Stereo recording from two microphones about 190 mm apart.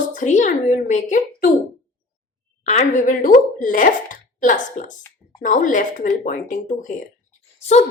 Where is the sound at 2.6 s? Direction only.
35° left (ahead or behind).